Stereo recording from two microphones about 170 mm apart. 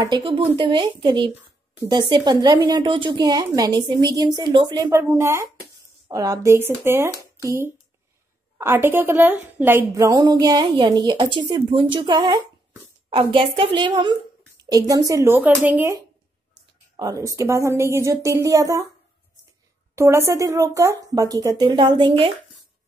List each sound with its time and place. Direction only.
0.0 s speech: 30° right (ahead or behind); by 15.9 s 10° right (ahead or behind)
16.9 s speech: 20° right (ahead or behind)
20.0 s speech: 15° right (ahead or behind); by 22.3 s 30° right (ahead or behind)